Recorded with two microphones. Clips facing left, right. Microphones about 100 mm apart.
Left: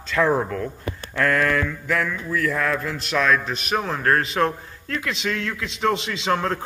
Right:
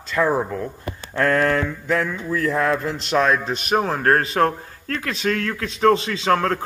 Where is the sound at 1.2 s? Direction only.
35° right (ahead or behind).